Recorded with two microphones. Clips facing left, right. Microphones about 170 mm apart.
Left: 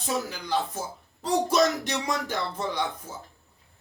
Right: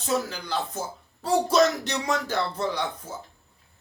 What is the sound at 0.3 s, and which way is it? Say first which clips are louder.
Music: left 2 dB; 15° left (ahead or behind).